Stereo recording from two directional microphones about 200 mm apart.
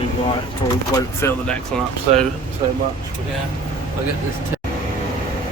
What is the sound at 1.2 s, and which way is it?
Speech, 10° left (ahead or behind).